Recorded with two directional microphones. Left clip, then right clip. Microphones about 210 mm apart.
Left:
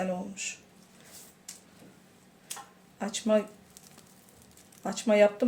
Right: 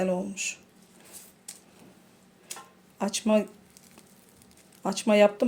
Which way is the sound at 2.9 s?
40° right (ahead or behind).